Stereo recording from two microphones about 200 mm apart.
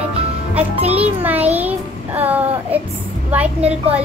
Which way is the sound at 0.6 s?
30° right (ahead or behind).